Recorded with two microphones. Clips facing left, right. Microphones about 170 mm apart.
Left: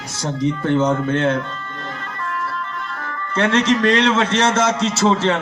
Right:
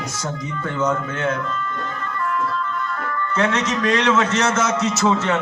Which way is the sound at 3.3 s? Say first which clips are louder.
Left 5 dB; 30° left (ahead or behind).